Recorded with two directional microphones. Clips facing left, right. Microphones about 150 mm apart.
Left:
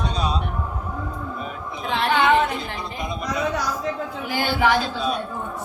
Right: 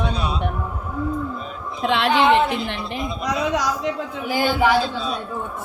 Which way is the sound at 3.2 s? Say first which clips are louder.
Right 3 dB; 85° right.